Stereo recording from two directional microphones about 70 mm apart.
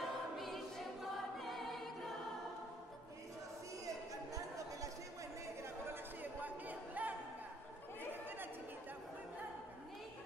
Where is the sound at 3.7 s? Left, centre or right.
Right.